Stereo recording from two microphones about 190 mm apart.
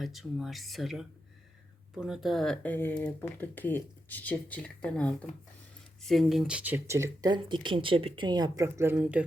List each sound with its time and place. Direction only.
0.0 s speech: centre (ahead or behind)